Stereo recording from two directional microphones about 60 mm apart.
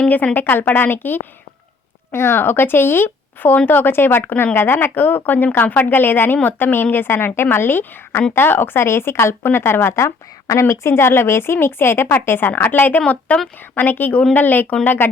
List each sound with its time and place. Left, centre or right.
0.3 s a woman's voice: left
9.9 s a woman's voice: left